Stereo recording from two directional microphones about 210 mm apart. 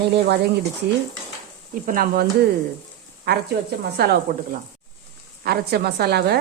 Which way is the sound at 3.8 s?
50° right (ahead or behind).